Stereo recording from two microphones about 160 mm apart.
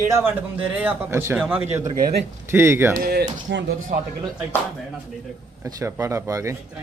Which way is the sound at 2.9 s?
75° right (ahead or behind).